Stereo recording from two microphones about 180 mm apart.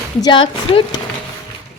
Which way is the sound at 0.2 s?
25° left (ahead or behind).